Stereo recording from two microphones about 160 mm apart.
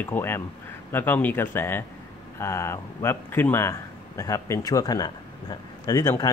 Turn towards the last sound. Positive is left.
turn(degrees=20)  # may be behind; listen again after turning